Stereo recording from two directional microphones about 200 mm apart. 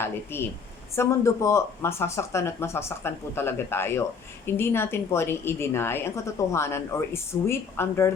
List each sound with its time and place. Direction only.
0.0 s a woman's voice: 10° left (ahead or behind)